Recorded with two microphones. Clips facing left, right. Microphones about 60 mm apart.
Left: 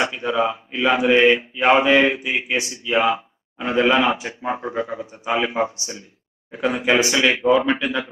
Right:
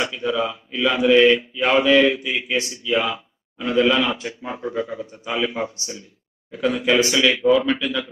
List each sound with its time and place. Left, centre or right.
0.0 s speech: left